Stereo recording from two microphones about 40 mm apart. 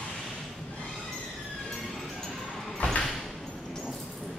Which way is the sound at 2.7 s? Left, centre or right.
Left.